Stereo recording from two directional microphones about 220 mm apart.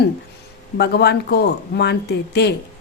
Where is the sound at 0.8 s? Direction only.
50° left (ahead or behind).